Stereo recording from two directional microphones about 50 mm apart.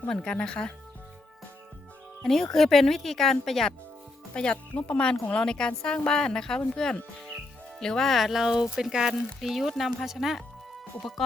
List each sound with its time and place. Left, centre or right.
0.1 s speech: centre
2.2 s speech: centre
4.4 s speech: centre